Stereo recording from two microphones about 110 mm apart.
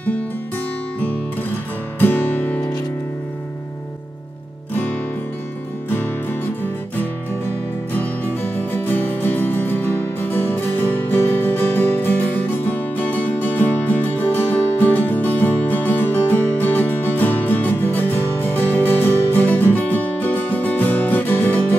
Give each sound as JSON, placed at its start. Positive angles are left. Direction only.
{"t": 2.0, "sound": "music", "side_deg": 15}
{"t": 7.9, "sound": "music", "side_deg": 15}